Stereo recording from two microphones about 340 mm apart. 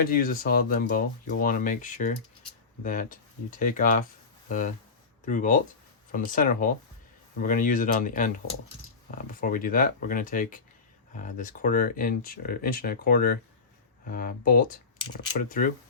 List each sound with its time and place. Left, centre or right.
0.0 s speech: left
9.4 s speech: left